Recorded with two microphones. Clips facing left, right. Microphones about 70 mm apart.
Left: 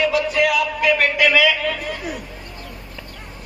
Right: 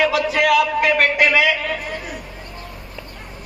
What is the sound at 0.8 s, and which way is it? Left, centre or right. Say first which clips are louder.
Speech: right 1 dB; right.